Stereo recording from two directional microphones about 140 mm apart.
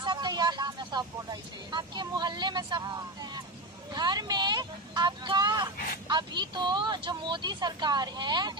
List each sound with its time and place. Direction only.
0.0 s speech: 30° right (ahead or behind)